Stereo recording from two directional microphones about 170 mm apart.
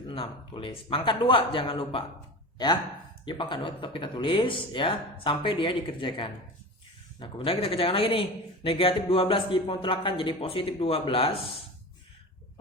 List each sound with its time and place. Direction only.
0.1 s a man's voice: 30° left (ahead or behind)
3.2 s a man's voice: 30° left (ahead or behind)